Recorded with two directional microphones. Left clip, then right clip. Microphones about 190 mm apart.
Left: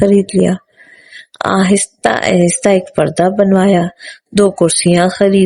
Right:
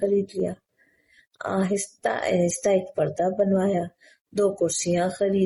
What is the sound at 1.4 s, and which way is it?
A woman's voice, 55° left (ahead or behind).